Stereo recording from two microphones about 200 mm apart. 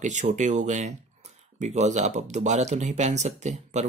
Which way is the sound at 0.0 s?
35° right (ahead or behind).